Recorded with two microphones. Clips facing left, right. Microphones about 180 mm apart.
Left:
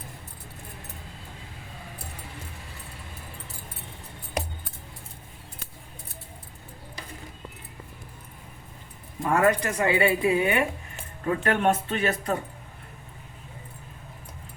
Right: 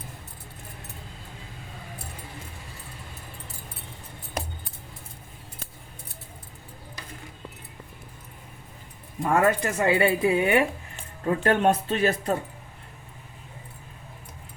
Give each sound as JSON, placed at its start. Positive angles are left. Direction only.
{"t": 9.3, "sound": "a woman's voice", "side_deg": -30}